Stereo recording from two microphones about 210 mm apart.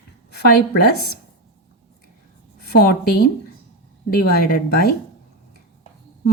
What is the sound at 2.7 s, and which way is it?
A woman's voice, 50° left (ahead or behind).